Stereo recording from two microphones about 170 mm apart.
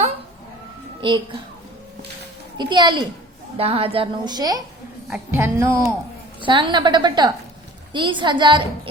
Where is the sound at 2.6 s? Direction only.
25° right (ahead or behind).